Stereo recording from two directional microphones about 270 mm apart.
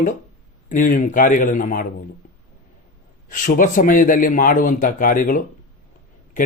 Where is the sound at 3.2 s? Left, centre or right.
Left.